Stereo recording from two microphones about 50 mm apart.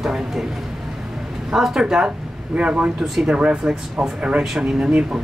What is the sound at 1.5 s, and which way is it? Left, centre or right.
Speech, centre.